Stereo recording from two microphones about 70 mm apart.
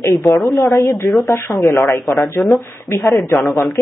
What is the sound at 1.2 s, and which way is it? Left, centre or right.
Speech, left.